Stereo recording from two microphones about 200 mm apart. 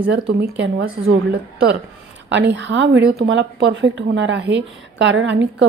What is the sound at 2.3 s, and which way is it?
A woman's voice, 60° right (ahead or behind).